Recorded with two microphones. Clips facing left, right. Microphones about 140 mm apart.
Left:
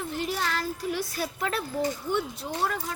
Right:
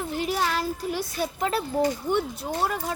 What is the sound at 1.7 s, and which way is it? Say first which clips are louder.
Speech: right 4 dB; 55° right (ahead or behind).